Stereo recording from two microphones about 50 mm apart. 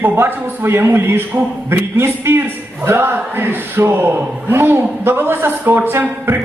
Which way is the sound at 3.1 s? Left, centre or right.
Right.